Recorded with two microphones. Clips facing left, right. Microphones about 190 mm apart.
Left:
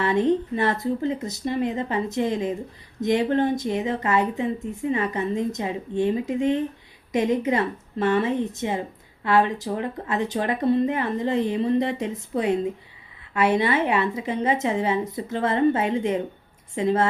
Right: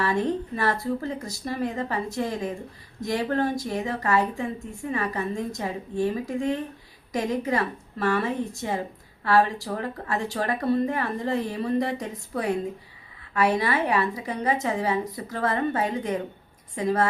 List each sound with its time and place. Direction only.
0.0 s a woman's voice: 20° left (ahead or behind)